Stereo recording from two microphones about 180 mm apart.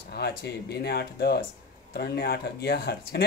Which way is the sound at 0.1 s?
65° left (ahead or behind).